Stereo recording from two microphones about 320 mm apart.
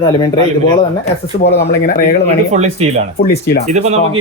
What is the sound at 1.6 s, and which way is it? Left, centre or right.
Speech, left.